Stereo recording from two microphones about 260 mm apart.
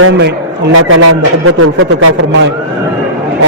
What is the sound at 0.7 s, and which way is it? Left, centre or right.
A man's voice, right.